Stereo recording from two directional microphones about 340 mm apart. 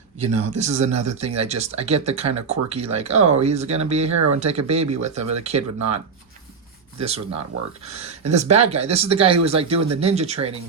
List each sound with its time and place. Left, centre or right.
0.5 s speech: centre
7.0 s speech: centre